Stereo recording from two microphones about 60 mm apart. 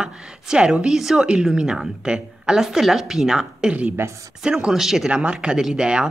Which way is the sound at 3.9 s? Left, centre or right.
Right.